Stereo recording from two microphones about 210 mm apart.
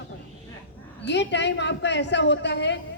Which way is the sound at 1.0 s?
55° left (ahead or behind).